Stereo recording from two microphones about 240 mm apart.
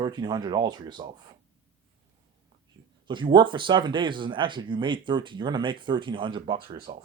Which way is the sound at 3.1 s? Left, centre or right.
Centre.